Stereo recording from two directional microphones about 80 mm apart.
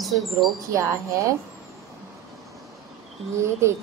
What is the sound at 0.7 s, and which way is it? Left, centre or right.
Speech, right.